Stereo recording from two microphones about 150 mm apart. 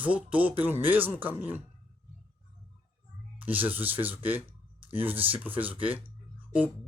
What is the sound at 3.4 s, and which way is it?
Speech, 10° right (ahead or behind).